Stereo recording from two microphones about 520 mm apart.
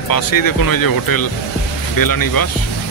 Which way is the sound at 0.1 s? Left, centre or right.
Left.